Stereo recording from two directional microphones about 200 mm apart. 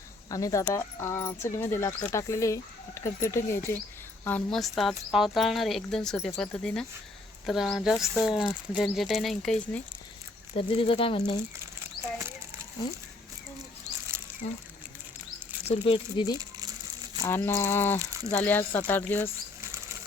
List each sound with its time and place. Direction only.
0.3 s a woman's voice: 15° left (ahead or behind)
10.5 s speech: 25° left (ahead or behind)
15.6 s speech: 30° left (ahead or behind)
17.2 s speech: 10° left (ahead or behind)